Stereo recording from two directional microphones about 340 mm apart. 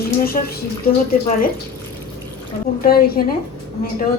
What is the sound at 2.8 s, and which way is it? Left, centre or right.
Speech, left.